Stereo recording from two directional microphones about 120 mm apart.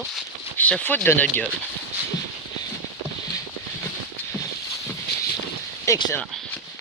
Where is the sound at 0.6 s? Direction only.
10° left (ahead or behind).